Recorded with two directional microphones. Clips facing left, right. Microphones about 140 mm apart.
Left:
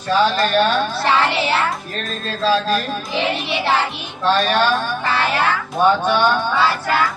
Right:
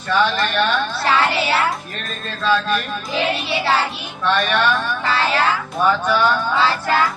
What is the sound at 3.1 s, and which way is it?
Speech, 20° left (ahead or behind).